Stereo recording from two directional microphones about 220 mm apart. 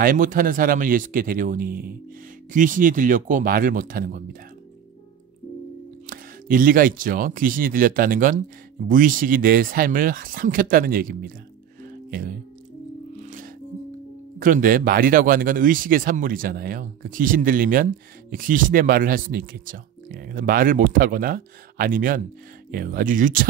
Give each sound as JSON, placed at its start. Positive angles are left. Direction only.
{"t": 0.0, "sound": "speech", "side_deg": -40}
{"t": 6.0, "sound": "speech", "side_deg": -40}
{"t": 11.8, "sound": "music", "side_deg": -40}
{"t": 14.4, "sound": "speech", "side_deg": -40}